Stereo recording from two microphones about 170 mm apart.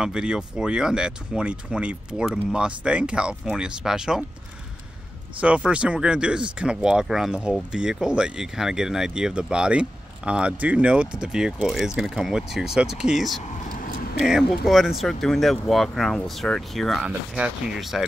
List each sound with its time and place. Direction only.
0.0 s speech: 5° right (ahead or behind)
5.4 s speech: 5° right (ahead or behind)
13.7 s a sound: 55° left (ahead or behind)
14.2 s speech: 5° right (ahead or behind)